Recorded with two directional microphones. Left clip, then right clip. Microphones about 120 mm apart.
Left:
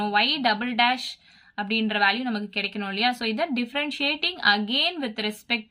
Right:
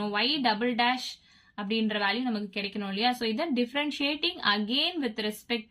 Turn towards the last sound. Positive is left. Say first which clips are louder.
# left 4 dB
turn(degrees=35)  # may be behind; listen again after turning